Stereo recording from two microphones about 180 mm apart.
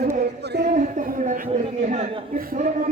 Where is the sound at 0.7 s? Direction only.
45° right (ahead or behind).